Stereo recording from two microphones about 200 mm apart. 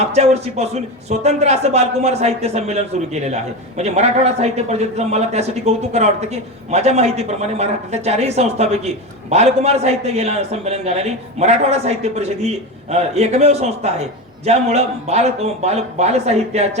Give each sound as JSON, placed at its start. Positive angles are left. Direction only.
{"t": 0.0, "sound": "a man's voice", "side_deg": -30}